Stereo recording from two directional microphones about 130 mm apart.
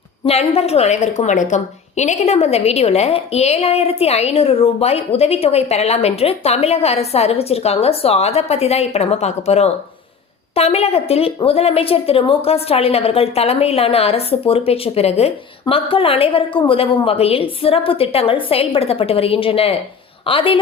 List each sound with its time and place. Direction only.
0.3 s a woman's voice: 50° left (ahead or behind)